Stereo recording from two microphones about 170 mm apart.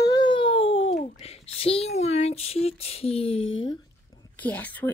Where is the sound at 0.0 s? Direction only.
25° left (ahead or behind).